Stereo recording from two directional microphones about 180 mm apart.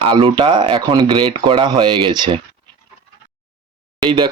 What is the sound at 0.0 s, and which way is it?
Speech, 30° right (ahead or behind).